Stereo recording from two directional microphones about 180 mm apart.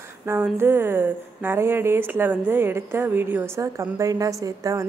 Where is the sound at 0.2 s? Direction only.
15° right (ahead or behind).